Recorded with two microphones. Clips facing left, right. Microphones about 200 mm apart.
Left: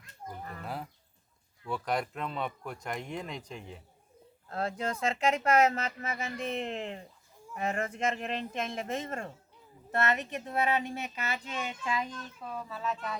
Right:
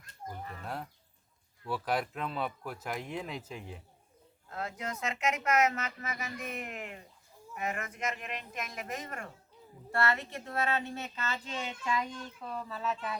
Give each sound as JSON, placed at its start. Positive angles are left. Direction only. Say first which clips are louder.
{"t": 0.6, "sound": "a sound", "louder": "left 1 dB", "side_deg": 0}
{"t": 1.6, "sound": "speech", "louder": "even", "side_deg": -5}
{"t": 4.4, "sound": "speech", "louder": "left 5 dB", "side_deg": 30}